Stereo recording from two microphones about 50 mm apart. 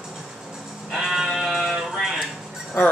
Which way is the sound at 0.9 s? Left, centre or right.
Centre.